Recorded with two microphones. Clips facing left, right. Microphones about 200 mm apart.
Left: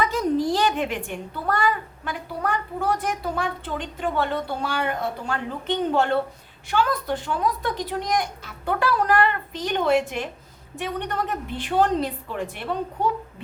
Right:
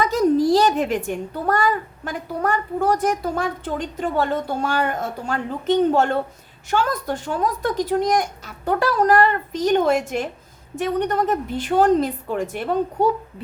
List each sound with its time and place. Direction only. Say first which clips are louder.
0.0 s a woman's voice: right 5 dB; 40° right (ahead or behind)